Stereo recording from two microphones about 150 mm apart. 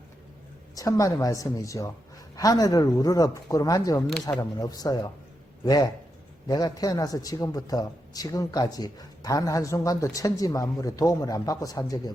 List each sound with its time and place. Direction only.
0.8 s a man's voice: 20° left (ahead or behind)